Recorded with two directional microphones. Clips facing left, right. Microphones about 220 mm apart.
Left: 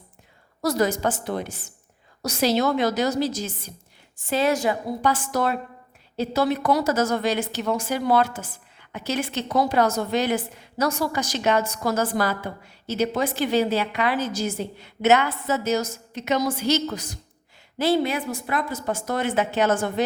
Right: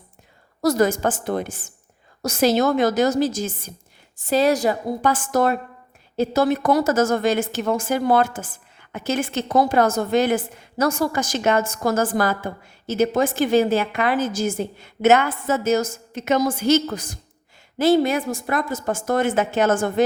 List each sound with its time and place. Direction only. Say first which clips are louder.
0.6 s a woman's voice: right 4 dB; 45° right (ahead or behind)
4.3 s a woman's voice: right 4 dB; 40° right (ahead or behind)